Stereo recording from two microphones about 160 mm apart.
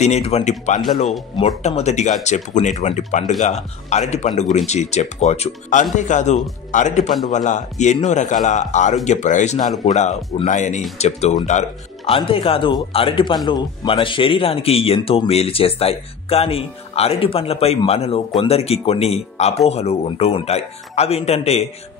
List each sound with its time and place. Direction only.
0.0 s speech: 45° left (ahead or behind)